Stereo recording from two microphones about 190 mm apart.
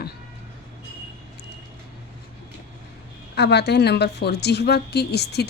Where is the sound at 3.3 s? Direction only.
60° left (ahead or behind).